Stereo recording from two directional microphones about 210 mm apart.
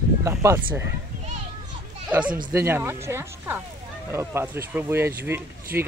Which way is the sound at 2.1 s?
5° right (ahead or behind).